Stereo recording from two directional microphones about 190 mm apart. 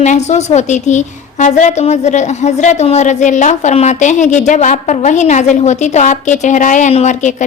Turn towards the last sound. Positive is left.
turn(degrees=40)  # may be behind; listen again after turning